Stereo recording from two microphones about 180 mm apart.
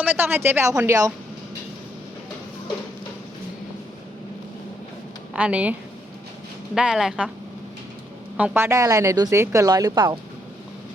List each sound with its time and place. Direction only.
0.0 s speech: 10° right (ahead or behind)
5.3 s speech: 5° right (ahead or behind)
6.7 s speech: 5° right (ahead or behind)
8.4 s speech: 10° right (ahead or behind)